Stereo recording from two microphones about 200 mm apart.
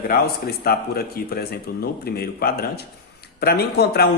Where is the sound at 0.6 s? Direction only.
50° left (ahead or behind).